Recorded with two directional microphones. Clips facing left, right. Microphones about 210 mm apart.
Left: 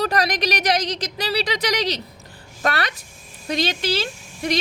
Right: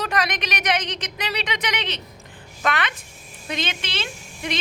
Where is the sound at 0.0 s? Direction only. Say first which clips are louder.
Left 4 dB; 35° left (ahead or behind).